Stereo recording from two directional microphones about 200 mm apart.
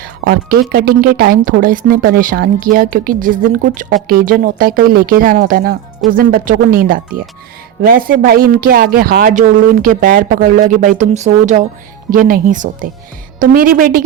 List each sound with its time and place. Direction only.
0.0 s speech: 45° right (ahead or behind)